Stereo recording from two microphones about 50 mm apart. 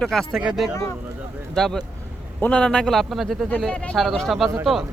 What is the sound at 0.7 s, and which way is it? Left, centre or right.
Speech, left.